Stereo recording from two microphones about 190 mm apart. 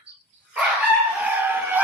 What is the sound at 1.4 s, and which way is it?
Vehicle, 10° right (ahead or behind).